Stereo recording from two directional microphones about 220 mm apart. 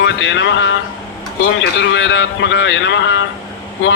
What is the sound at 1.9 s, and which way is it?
Speech, 55° left (ahead or behind).